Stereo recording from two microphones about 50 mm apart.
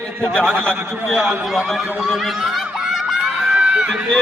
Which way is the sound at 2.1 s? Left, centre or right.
Centre.